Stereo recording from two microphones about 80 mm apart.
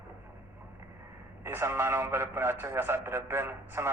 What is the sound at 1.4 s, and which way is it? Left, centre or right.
A man's voice, right.